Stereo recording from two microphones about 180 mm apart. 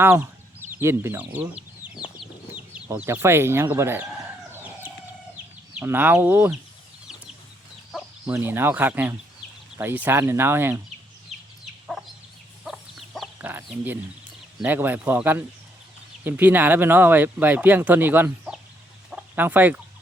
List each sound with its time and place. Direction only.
0.0 s speech: 10° right (ahead or behind)
2.0 s chicken: 25° left (ahead or behind)
2.6 s speech: 5° right (ahead or behind)
4.5 s chicken: 10° right (ahead or behind)
5.7 s speech: 10° right (ahead or behind)
8.3 s speech: 10° right (ahead or behind)
11.6 s chicken: centre (ahead or behind)
13.5 s speech: 10° right (ahead or behind)